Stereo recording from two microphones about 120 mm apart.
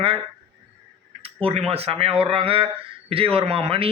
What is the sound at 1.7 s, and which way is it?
Speech, 55° right (ahead or behind).